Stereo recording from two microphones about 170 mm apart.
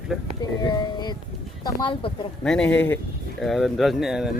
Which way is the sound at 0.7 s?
25° left (ahead or behind).